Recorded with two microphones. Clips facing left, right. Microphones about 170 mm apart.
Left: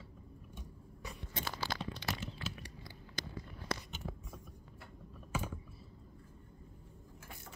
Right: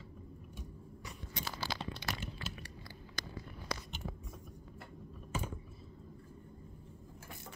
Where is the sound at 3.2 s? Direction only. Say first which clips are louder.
Left 2 dB; 20° left (ahead or behind).